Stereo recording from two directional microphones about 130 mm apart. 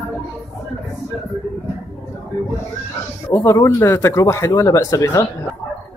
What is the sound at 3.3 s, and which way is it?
Speech, 20° left (ahead or behind).